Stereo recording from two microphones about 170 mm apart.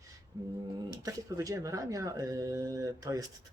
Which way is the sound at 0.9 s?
20° right (ahead or behind).